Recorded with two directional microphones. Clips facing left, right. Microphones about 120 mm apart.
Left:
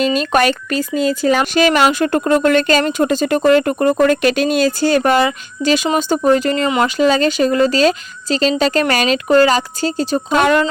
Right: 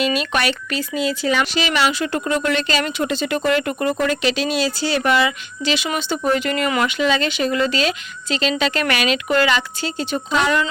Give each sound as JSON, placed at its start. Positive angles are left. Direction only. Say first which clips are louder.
{"t": 0.0, "sound": "speech", "louder": "left 6 dB", "side_deg": 40}